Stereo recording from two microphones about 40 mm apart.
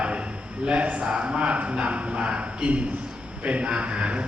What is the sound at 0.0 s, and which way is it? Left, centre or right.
A man's voice, right.